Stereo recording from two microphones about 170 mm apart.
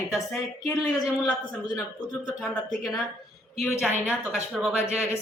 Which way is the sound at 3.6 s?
Centre (ahead or behind).